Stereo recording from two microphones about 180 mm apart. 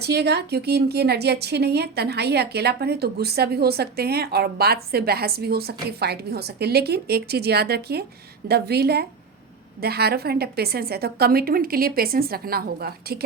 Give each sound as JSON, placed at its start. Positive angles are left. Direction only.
{"t": 0.0, "sound": "a woman's voice", "side_deg": -65}